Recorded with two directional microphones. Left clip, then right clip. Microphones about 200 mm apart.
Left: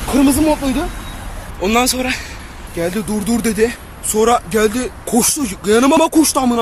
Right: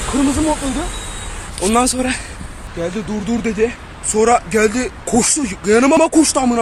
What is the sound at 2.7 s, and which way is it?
Speech, 30° left (ahead or behind).